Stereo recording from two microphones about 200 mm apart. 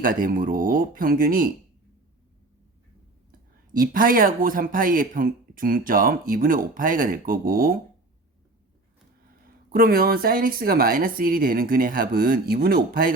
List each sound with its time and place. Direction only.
0.0 s speech: 45° right (ahead or behind)
3.7 s speech: 45° right (ahead or behind)
9.7 s speech: 45° right (ahead or behind)